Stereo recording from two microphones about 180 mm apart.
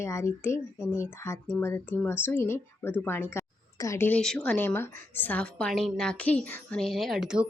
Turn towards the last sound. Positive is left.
turn(degrees=-5)  # may be behind; listen again after turning